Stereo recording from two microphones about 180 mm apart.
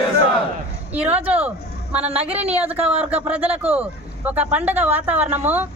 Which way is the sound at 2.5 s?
10° right (ahead or behind).